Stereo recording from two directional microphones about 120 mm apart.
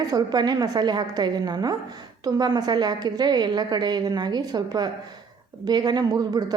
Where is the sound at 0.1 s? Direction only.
35° right (ahead or behind).